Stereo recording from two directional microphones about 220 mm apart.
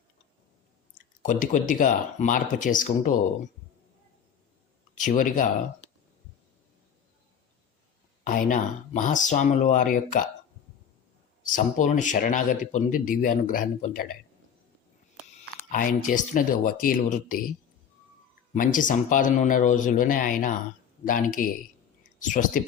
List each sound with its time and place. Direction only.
0.9 s speech: 35° left (ahead or behind)
4.9 s speech: 35° left (ahead or behind)
8.2 s speech: 35° left (ahead or behind)
11.4 s speech: 35° left (ahead or behind)
15.7 s speech: 35° left (ahead or behind)
18.5 s speech: 35° left (ahead or behind)